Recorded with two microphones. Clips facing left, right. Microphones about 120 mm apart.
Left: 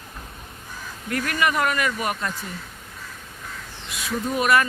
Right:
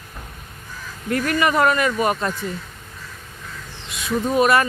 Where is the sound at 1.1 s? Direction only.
30° right (ahead or behind).